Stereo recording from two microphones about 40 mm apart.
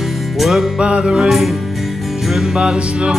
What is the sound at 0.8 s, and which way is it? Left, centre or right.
Music, right.